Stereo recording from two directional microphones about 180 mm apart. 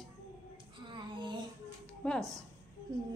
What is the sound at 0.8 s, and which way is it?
Child singing, 25° right (ahead or behind).